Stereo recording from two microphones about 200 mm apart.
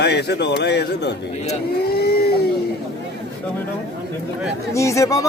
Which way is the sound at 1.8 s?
50° left (ahead or behind).